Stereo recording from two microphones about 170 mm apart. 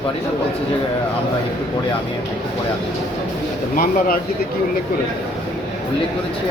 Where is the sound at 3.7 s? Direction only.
60° left (ahead or behind).